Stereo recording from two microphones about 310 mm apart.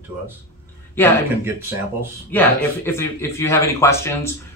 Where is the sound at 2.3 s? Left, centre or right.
Centre.